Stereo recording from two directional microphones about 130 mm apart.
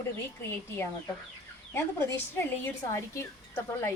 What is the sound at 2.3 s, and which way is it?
Speech, 20° left (ahead or behind).